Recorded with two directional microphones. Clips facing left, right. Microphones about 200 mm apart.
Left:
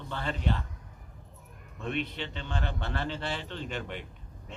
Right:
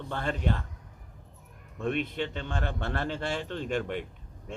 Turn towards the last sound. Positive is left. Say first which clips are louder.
# right 6 dB
turn(degrees=-50)  # may be behind; listen again after turning